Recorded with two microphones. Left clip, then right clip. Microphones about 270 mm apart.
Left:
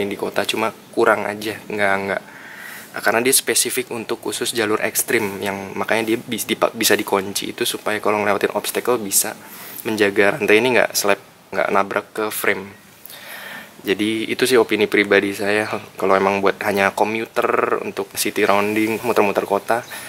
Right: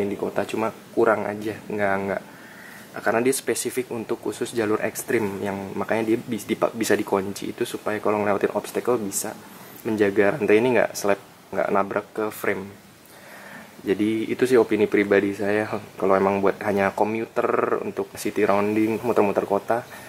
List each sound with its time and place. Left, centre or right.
0.4 s speech: centre
13.8 s speech: centre